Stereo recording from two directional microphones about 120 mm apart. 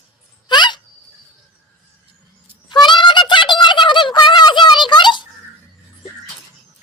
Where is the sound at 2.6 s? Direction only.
40° left (ahead or behind).